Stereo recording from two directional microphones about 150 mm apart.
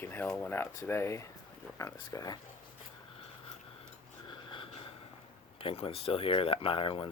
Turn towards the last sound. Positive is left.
turn(degrees=35)  # may be behind; listen again after turning